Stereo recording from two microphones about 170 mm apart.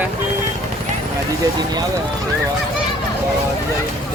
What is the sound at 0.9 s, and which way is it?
Vehicle, 45° right (ahead or behind).